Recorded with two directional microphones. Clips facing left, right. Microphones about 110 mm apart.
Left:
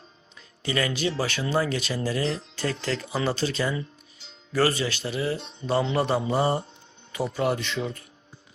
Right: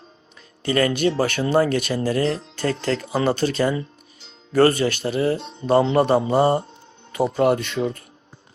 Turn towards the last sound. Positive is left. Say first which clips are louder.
# right 7 dB
turn(degrees=-50)  # may be behind; listen again after turning